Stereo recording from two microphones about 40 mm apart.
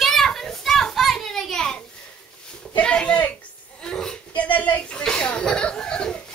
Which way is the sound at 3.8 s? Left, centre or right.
Centre.